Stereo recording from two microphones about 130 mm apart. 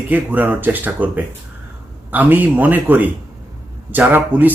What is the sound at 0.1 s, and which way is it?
Speech, 15° right (ahead or behind).